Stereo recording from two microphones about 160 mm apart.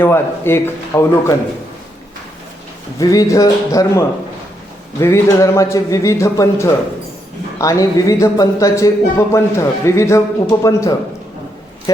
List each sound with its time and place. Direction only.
0.0 s a man's voice: 15° left (ahead or behind)
3.0 s speech: 20° left (ahead or behind)